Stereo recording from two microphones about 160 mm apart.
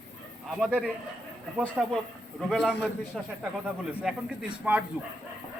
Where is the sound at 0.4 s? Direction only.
Centre (ahead or behind).